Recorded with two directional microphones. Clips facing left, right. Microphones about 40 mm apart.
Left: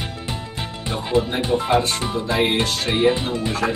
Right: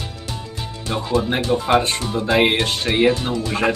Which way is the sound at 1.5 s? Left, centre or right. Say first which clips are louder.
Left 1 dB; right.